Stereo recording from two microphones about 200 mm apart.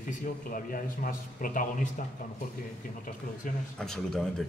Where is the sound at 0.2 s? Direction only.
45° left (ahead or behind).